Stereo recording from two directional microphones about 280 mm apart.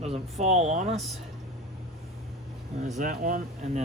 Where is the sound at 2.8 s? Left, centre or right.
Right.